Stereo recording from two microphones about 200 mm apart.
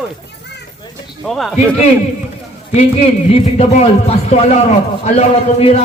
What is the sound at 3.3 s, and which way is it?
Speech, 35° left (ahead or behind).